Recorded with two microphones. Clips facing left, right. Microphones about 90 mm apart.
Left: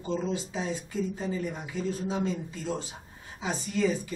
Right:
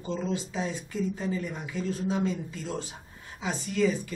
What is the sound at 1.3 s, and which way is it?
Speech, 25° left (ahead or behind).